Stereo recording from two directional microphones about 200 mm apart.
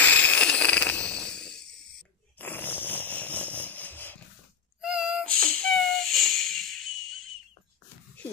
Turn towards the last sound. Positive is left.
turn(degrees=0)  # may be behind; listen again after turning